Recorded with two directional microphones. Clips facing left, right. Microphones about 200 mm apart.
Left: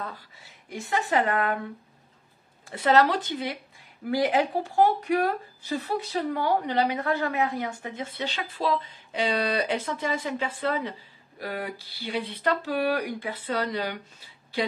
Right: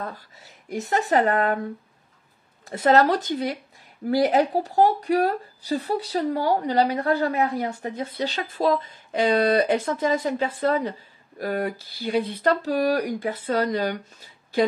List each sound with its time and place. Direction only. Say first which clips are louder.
0.7 s speech: right 5 dB; 40° right (ahead or behind)
2.6 s speech: right 3 dB; 45° right (ahead or behind)